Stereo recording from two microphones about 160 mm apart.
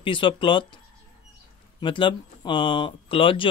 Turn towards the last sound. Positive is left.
turn(degrees=35)  # may be behind; listen again after turning